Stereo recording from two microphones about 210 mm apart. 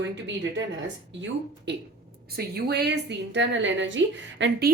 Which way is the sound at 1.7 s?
55° right (ahead or behind).